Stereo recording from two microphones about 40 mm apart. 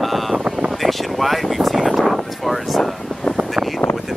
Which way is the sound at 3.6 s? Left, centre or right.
Right.